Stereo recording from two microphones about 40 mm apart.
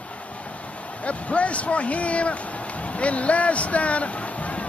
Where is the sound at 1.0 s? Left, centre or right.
Left.